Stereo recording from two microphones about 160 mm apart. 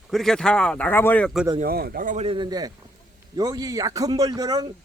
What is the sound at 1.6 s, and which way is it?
Speech, 70° right (ahead or behind).